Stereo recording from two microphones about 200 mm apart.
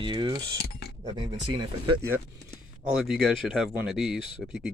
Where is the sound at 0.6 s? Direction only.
55° left (ahead or behind).